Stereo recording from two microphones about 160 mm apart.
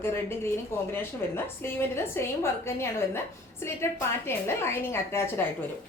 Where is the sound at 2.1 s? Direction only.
15° left (ahead or behind).